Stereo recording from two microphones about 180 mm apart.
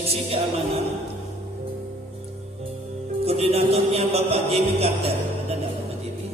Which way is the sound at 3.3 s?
35° right (ahead or behind).